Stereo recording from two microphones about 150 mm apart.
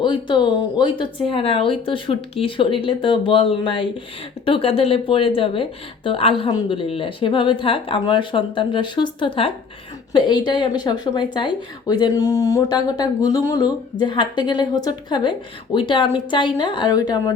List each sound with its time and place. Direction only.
0.0 s speech: 30° left (ahead or behind)